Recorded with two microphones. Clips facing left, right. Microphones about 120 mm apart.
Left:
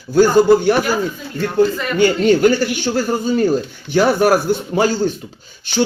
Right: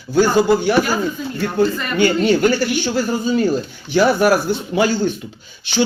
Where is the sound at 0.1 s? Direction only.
45° left (ahead or behind).